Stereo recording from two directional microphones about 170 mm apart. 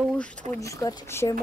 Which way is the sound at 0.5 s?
20° left (ahead or behind).